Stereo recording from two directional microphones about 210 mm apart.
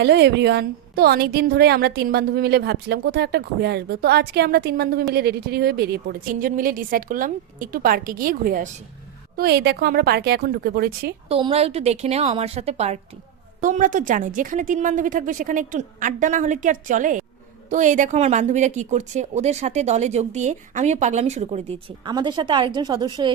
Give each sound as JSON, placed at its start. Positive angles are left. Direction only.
{"t": 0.0, "sound": "a woman's voice", "side_deg": -55}
{"t": 11.3, "sound": "a woman's voice", "side_deg": -25}